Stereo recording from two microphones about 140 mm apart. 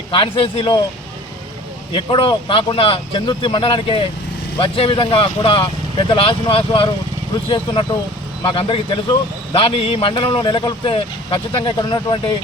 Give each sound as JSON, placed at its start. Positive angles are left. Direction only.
{"t": 0.1, "sound": "speech", "side_deg": 35}
{"t": 1.9, "sound": "speech", "side_deg": 35}